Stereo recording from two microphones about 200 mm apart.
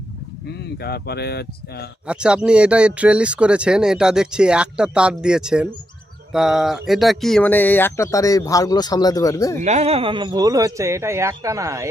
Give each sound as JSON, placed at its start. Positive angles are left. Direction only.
{"t": 0.5, "sound": "speech", "side_deg": 55}
{"t": 2.0, "sound": "speech", "side_deg": -5}
{"t": 9.6, "sound": "speech", "side_deg": -35}